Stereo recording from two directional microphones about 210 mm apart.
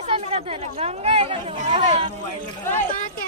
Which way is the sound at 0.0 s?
30° right (ahead or behind).